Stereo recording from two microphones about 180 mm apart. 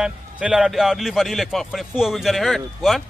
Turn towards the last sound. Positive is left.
turn(degrees=0)  # may be behind; listen again after turning